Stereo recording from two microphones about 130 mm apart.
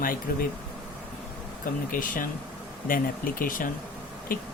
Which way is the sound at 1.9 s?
90° left.